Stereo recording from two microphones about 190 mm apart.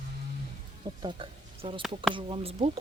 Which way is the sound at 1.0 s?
25° right (ahead or behind).